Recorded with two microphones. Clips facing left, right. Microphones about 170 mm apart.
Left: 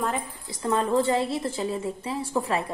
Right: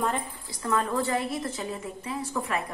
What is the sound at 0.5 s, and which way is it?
A woman's voice, 25° left (ahead or behind).